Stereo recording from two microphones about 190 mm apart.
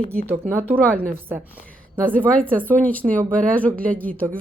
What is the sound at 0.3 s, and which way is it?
Speech, 10° right (ahead or behind).